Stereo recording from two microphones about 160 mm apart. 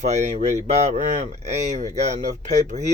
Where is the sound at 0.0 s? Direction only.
45° right (ahead or behind).